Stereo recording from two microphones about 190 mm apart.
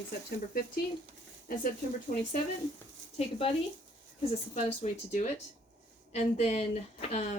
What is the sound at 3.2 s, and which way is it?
Speech, 35° left (ahead or behind).